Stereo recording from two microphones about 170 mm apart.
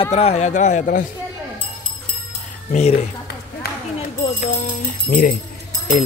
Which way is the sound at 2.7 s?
40° left (ahead or behind).